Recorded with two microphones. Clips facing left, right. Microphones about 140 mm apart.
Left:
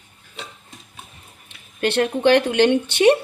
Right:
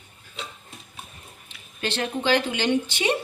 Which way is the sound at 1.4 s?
55° left (ahead or behind).